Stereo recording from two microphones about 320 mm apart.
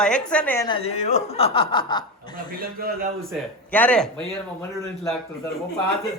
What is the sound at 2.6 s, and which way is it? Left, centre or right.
Speech, right.